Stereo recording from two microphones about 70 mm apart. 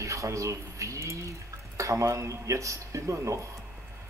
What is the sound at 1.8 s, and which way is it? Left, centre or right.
Speech, right.